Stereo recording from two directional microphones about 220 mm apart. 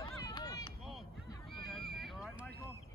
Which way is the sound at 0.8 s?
Centre (ahead or behind).